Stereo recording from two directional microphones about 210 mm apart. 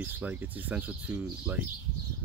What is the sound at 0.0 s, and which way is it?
Speech, 10° right (ahead or behind).